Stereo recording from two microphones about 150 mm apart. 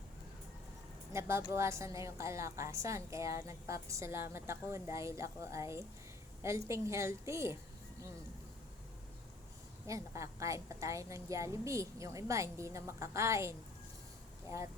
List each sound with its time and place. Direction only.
1.1 s a woman's voice: 15° right (ahead or behind)
9.8 s a woman's voice: 20° right (ahead or behind)